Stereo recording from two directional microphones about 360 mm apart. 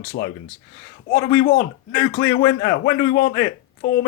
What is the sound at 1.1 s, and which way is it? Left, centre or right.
Speech, left.